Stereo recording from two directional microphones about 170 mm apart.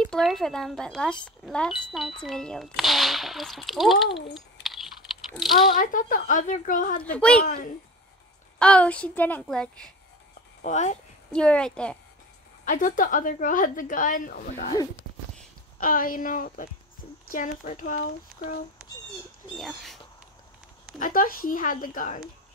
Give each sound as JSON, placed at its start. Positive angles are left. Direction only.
{"t": 0.0, "sound": "speech", "side_deg": 0}
{"t": 5.4, "sound": "speech", "side_deg": 0}
{"t": 5.7, "sound": "a woman's voice", "side_deg": 50}
{"t": 7.0, "sound": "a woman's voice", "side_deg": 5}
{"t": 7.4, "sound": "a woman's voice", "side_deg": 50}
{"t": 8.5, "sound": "a woman's voice", "side_deg": 5}
{"t": 10.6, "sound": "speech", "side_deg": 45}
{"t": 11.3, "sound": "speech", "side_deg": 5}
{"t": 12.6, "sound": "a woman's voice", "side_deg": 50}
{"t": 15.8, "sound": "a woman's voice", "side_deg": 55}
{"t": 19.5, "sound": "speech", "side_deg": 0}
{"t": 21.0, "sound": "a woman's voice", "side_deg": 55}